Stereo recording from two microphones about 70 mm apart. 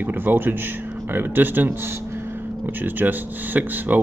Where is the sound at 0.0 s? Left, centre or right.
Right.